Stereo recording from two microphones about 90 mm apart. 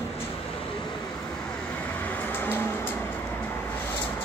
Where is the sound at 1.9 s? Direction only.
20° left (ahead or behind).